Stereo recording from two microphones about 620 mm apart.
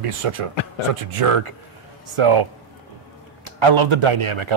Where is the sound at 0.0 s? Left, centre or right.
Right.